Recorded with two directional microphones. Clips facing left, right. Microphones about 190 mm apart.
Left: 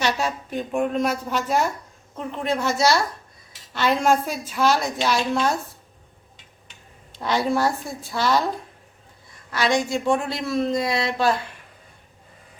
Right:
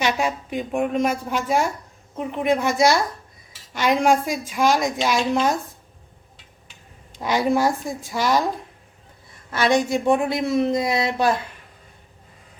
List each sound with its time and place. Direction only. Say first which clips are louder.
0.0 s a woman's voice: right 2 dB; 15° right (ahead or behind)
7.2 s a woman's voice: right 2 dB; 15° right (ahead or behind)
9.5 s speech: right 3 dB; 20° right (ahead or behind)